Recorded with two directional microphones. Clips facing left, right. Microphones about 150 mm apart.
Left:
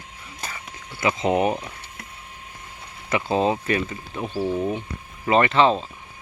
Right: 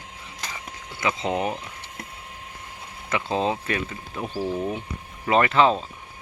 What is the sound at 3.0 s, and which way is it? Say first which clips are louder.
Speech: left 3 dB; 5° left (ahead or behind).